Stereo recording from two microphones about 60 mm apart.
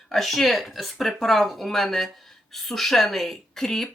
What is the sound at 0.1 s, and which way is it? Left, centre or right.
Speech, centre.